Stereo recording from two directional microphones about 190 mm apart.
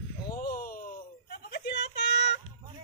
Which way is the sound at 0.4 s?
50° left (ahead or behind).